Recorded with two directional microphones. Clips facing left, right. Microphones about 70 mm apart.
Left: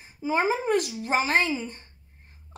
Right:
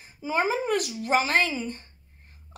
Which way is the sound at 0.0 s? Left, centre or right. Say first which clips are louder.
Left 1 dB; left.